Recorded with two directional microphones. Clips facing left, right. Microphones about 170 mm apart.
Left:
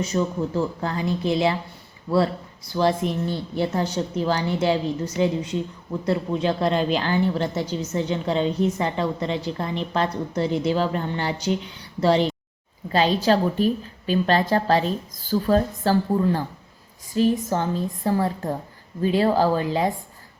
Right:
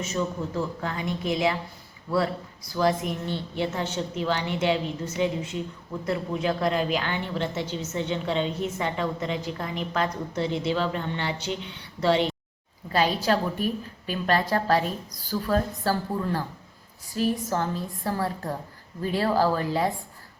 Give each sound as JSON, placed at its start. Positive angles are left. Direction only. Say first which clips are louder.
{"t": 0.0, "sound": "a woman's voice", "louder": "left 5 dB", "side_deg": 35}
{"t": 12.9, "sound": "a woman's voice", "louder": "left 4 dB", "side_deg": 25}